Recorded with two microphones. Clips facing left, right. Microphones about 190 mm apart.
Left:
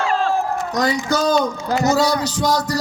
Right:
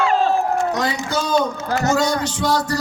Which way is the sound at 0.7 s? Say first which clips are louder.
Left 3 dB; 40° left (ahead or behind).